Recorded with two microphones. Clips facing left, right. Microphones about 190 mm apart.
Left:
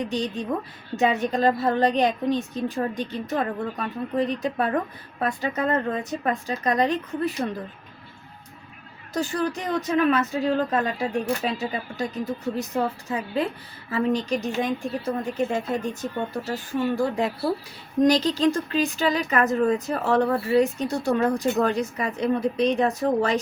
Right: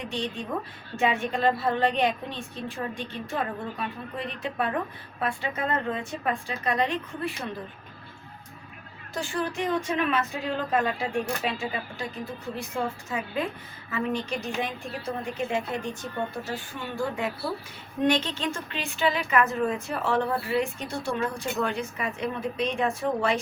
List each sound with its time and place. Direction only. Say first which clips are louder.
0.0 s speech: left 5 dB; 40° left (ahead or behind)
9.1 s speech: left 4 dB; 40° left (ahead or behind)